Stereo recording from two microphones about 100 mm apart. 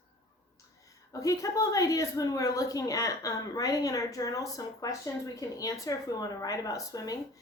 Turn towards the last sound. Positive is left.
turn(degrees=40)  # may be behind; listen again after turning